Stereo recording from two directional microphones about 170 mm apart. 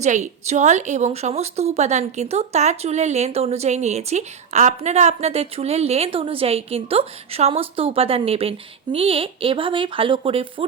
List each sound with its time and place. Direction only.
0.0 s a woman's voice: 45° right (ahead or behind)